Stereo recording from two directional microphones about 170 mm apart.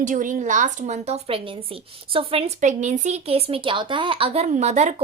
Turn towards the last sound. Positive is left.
turn(degrees=-40)  # may be behind; listen again after turning